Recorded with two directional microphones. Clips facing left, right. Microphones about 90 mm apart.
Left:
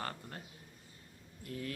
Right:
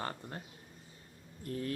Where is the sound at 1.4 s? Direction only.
35° right (ahead or behind).